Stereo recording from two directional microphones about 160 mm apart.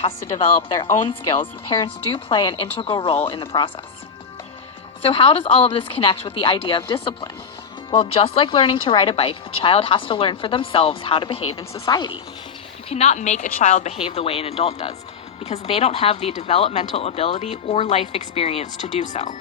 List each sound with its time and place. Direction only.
0.0 s speech: 35° left (ahead or behind)
5.0 s a woman's voice: 35° left (ahead or behind)
12.9 s speech: 40° left (ahead or behind)